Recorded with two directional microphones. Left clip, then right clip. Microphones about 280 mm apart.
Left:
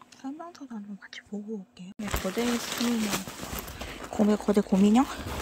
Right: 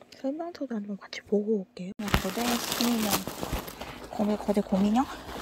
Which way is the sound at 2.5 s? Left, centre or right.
Right.